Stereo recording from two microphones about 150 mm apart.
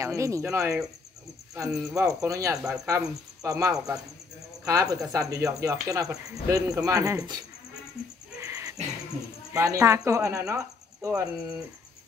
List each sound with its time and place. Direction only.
0.0 s speech: 20° right (ahead or behind)
8.4 s owl: 20° right (ahead or behind)
9.5 s speech: 20° right (ahead or behind)